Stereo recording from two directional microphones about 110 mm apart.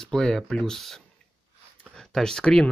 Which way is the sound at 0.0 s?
5° left (ahead or behind).